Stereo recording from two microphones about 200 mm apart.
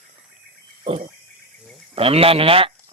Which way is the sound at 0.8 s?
30° right (ahead or behind).